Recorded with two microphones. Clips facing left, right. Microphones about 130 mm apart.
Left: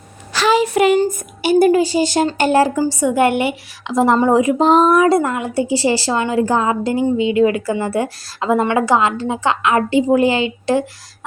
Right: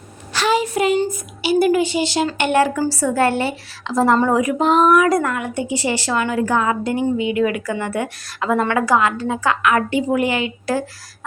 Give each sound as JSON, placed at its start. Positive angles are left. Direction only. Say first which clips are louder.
{"t": 0.4, "sound": "a sound", "louder": "left 4 dB", "side_deg": 85}
{"t": 0.9, "sound": "a woman's voice", "louder": "left 4 dB", "side_deg": 45}
{"t": 2.7, "sound": "a woman's voice", "louder": "left 3 dB", "side_deg": 20}